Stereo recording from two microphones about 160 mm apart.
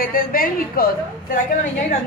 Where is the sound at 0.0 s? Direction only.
65° left (ahead or behind).